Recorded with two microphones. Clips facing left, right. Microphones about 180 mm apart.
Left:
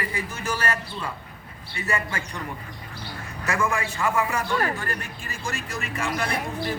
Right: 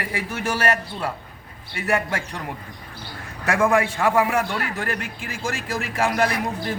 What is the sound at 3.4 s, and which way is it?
A man's voice, 75° right (ahead or behind).